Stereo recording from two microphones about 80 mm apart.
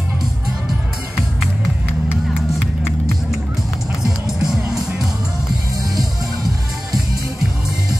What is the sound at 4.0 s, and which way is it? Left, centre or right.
Music, centre.